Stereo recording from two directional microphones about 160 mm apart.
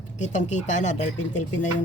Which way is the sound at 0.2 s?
50° left (ahead or behind).